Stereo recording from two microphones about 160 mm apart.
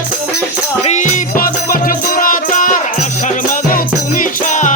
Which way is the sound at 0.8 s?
50° left (ahead or behind).